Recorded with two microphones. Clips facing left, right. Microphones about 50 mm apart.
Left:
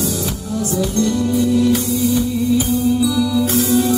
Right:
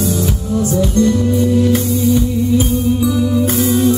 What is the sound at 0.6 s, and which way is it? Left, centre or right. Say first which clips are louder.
Music: right 4 dB; right.